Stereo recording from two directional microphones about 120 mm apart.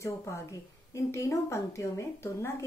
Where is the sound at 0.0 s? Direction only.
25° left (ahead or behind).